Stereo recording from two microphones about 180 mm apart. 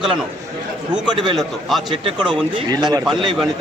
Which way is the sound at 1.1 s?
30° right (ahead or behind).